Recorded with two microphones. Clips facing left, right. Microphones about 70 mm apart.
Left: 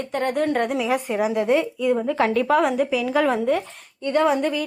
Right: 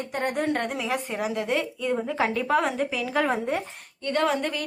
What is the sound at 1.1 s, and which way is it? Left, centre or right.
Speech, centre.